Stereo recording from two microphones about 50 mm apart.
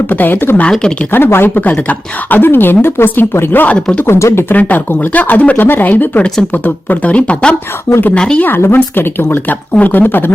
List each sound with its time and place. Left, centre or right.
0.1 s a woman's voice: left
0.7 s speech: centre
1.1 s a woman's voice: left
1.7 s speech: left
2.4 s a woman's voice: left
3.7 s speech: left
4.0 s speech: left
4.4 s speech: left; by 8.4 s centre
8.4 s a woman's voice: left